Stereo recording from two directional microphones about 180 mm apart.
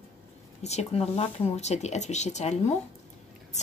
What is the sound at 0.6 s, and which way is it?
Speech, 35° left (ahead or behind).